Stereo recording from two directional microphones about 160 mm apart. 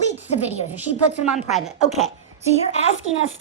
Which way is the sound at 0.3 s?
45° left (ahead or behind).